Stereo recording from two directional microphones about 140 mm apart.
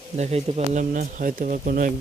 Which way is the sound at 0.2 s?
50° right (ahead or behind).